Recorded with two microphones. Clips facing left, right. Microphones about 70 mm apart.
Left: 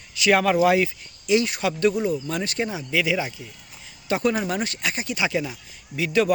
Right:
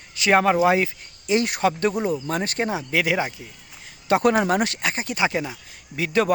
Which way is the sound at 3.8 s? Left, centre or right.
Right.